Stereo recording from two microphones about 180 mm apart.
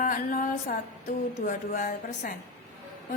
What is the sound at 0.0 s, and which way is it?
A woman's voice, 50° left (ahead or behind).